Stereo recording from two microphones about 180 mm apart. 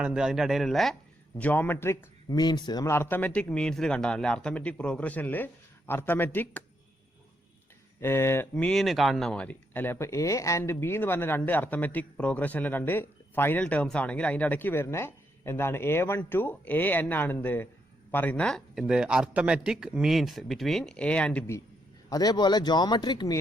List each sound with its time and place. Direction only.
0.0 s speech: 5° right (ahead or behind)
8.0 s speech: 15° left (ahead or behind)
22.1 s speech: 20° left (ahead or behind)